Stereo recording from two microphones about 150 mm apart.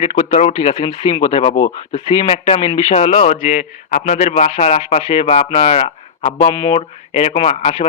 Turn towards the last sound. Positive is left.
turn(degrees=40)  # may be behind; listen again after turning